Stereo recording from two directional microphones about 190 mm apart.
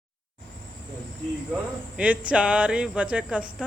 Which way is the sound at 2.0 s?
5° right (ahead or behind).